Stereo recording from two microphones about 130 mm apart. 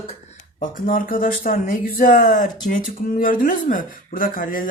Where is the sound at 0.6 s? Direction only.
90° left.